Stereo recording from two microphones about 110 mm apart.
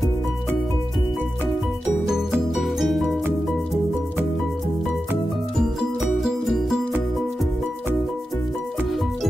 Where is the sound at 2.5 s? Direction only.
Centre (ahead or behind).